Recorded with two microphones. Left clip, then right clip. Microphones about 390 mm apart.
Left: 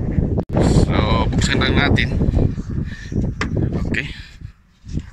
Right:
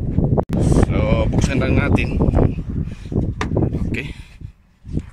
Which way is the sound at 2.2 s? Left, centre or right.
Right.